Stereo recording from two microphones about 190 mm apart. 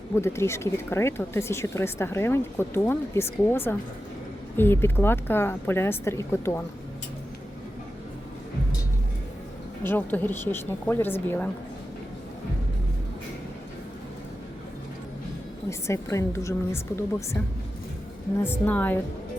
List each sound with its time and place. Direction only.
0.2 s speech: 15° left (ahead or behind)
9.8 s speech: 10° left (ahead or behind)
15.9 s speech: 15° left (ahead or behind)
18.4 s speech: 10° left (ahead or behind)